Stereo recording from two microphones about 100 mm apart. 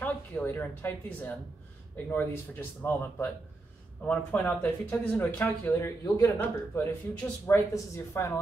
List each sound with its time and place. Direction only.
0.0 s speech: 20° left (ahead or behind)